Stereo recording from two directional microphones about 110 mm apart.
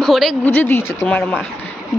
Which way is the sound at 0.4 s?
15° left (ahead or behind).